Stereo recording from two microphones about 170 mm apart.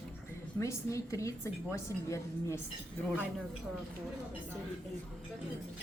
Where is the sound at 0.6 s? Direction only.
15° left (ahead or behind).